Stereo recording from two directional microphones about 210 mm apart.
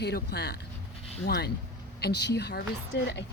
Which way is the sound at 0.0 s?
50° left (ahead or behind).